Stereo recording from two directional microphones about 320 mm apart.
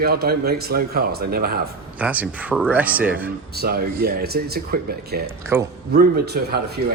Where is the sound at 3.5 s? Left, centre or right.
Right.